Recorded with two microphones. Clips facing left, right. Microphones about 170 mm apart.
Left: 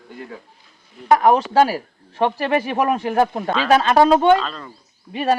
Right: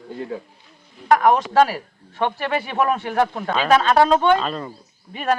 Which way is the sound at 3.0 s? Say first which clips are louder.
Left 2 dB; 25° left (ahead or behind).